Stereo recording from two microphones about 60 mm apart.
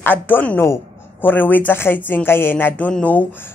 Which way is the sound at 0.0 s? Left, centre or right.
Left.